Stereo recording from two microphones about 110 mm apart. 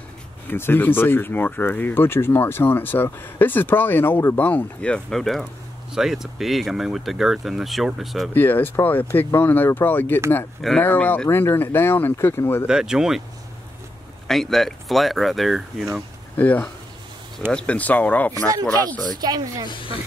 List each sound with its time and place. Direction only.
0.5 s speech: 20° left (ahead or behind); by 8.3 s centre (ahead or behind)
8.3 s speech: 20° left (ahead or behind)
12.6 s speech: 5° right (ahead or behind)
14.2 s speech: centre (ahead or behind)
16.3 s speech: 15° left (ahead or behind)
18.3 s speech: 30° right (ahead or behind)
19.7 s speech: 50° left (ahead or behind)